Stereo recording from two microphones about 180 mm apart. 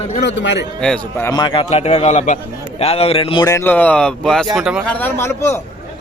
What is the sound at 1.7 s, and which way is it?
Speech, 35° left (ahead or behind).